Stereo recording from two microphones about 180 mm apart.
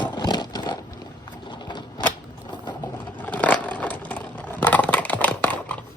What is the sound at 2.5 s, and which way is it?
Vehicle, 25° left (ahead or behind).